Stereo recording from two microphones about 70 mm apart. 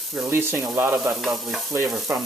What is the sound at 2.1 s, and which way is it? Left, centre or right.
Frying, right.